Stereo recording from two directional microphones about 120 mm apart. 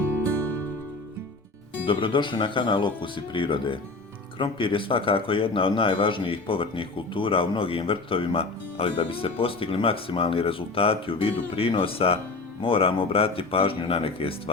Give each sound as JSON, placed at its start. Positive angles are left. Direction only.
{"t": 1.9, "sound": "speech", "side_deg": 40}